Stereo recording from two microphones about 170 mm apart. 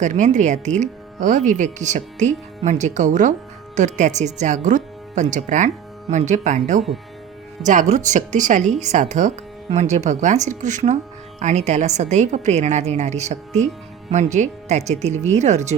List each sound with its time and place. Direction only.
0.0 s speech: 45° right (ahead or behind)